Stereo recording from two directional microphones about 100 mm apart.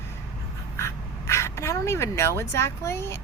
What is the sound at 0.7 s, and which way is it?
Speech, 30° left (ahead or behind).